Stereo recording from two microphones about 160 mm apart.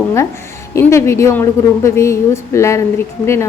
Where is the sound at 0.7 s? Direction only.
15° left (ahead or behind).